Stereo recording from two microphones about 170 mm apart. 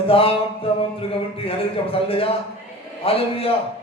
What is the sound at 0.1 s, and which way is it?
A man's voice, 35° left (ahead or behind).